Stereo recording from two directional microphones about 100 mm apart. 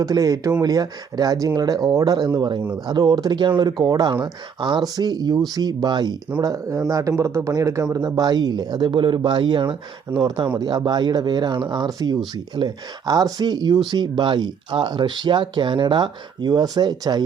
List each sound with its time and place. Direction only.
0.0 s speech: 35° right (ahead or behind)
6.4 s speech: 35° right (ahead or behind)
7.9 s speech: 40° right (ahead or behind)
8.9 s speech: 60° right (ahead or behind); by 17.2 s 45° right (ahead or behind)